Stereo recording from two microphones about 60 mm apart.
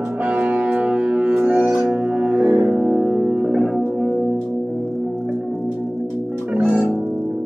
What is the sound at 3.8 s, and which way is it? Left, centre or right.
Music, right.